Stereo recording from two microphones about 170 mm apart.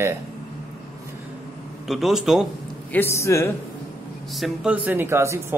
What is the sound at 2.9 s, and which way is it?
Speech, 15° left (ahead or behind).